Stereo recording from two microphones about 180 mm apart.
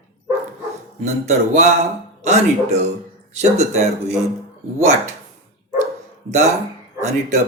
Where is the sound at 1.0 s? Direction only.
40° right (ahead or behind).